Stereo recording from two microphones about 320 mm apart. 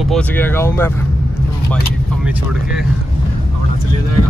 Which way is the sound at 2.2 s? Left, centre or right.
Centre.